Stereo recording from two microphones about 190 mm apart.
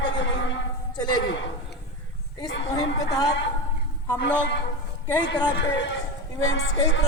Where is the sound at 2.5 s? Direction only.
70° left (ahead or behind).